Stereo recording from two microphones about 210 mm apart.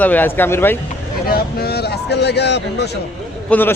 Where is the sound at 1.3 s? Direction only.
50° left (ahead or behind).